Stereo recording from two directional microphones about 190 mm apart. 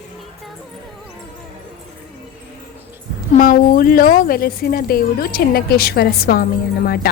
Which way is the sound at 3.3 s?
45° left (ahead or behind).